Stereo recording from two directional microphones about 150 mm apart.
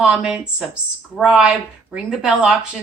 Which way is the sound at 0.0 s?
5° right (ahead or behind).